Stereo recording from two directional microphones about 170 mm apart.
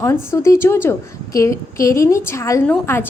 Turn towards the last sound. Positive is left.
turn(degrees=10)  # may be behind; listen again after turning